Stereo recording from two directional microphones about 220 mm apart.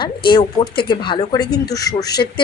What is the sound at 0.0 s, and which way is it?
A woman's voice, 20° left (ahead or behind).